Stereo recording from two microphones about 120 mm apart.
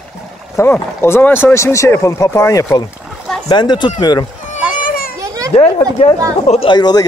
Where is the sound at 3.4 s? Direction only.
35° left (ahead or behind).